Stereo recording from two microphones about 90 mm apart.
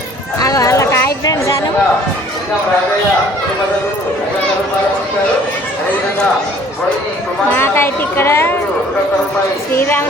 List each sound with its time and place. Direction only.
0.3 s a sound: 40° left (ahead or behind)
1.2 s chatter: 45° left (ahead or behind)
7.5 s speech: 25° left (ahead or behind)
9.7 s speech: 25° left (ahead or behind)